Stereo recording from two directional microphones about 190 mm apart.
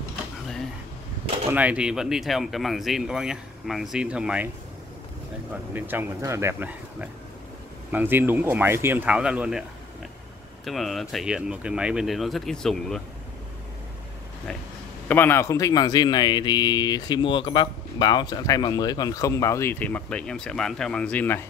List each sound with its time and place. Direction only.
1.5 s speech: 5° right (ahead or behind)
5.5 s speech: 10° right (ahead or behind)
15.0 s a man's voice: 10° left (ahead or behind)